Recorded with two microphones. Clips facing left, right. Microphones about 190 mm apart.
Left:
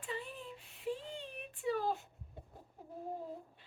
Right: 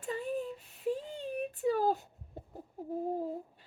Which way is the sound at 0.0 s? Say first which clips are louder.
Right 9 dB; 45° right (ahead or behind).